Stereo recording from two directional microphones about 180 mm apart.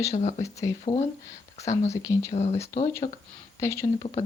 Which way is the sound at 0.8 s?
35° left (ahead or behind).